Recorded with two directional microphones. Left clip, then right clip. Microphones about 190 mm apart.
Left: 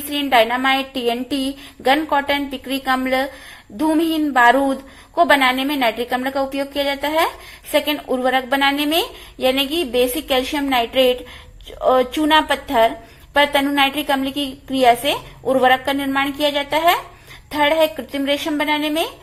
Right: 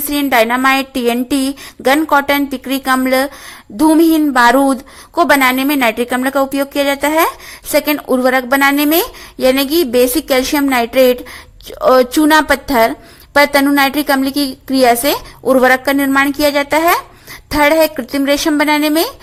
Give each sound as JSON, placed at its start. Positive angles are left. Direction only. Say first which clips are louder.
{"t": 0.1, "sound": "a woman's voice", "louder": "right 3 dB", "side_deg": -40}